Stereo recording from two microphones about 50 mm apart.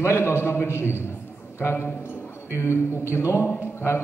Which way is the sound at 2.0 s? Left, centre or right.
Left.